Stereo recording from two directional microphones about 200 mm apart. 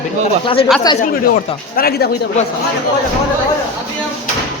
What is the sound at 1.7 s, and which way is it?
Speech, 50° left (ahead or behind).